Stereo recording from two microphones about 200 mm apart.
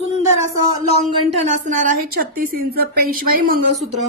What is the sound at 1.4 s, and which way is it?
A woman's voice, 35° right (ahead or behind).